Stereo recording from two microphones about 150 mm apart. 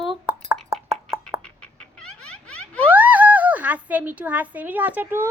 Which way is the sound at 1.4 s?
5° left (ahead or behind).